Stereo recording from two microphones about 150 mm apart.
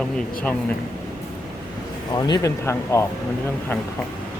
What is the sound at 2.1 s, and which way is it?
Speech, 25° left (ahead or behind).